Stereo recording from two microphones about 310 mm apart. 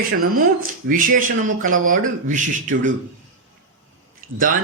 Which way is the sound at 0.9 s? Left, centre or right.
Right.